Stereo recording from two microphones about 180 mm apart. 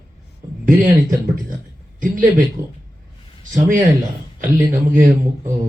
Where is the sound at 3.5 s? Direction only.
45° right (ahead or behind).